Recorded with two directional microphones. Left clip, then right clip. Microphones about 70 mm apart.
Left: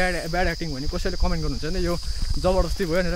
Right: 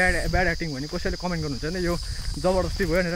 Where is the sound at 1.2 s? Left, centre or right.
Left.